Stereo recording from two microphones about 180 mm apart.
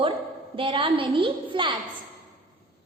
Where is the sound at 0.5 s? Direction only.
30° right (ahead or behind).